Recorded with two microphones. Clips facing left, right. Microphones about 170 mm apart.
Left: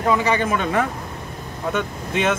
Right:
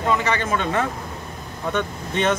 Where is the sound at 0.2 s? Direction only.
15° left (ahead or behind).